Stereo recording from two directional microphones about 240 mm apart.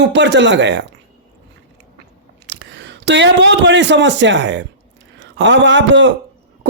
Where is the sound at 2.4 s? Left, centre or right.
Right.